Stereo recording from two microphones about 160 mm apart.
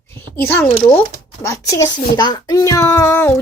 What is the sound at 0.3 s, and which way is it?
Speech, 15° left (ahead or behind).